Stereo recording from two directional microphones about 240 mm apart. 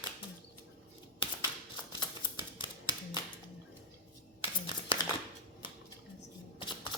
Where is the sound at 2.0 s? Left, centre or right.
Centre.